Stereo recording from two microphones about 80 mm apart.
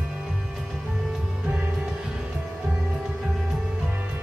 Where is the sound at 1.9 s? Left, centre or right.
Centre.